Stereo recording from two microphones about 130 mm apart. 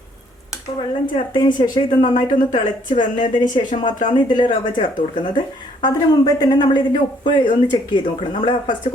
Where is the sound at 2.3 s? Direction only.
90° left.